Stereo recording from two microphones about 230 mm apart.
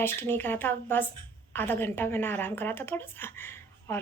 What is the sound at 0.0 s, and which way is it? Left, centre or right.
A woman's voice, centre.